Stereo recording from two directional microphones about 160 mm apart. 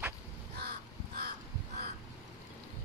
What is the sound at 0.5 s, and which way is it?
Crow, 90° right.